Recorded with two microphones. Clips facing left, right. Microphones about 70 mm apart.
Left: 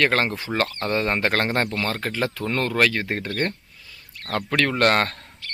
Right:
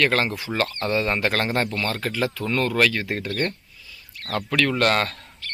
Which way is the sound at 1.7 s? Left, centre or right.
Left.